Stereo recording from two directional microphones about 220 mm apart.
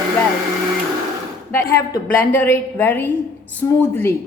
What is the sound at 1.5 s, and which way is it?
A woman's voice, 10° left (ahead or behind).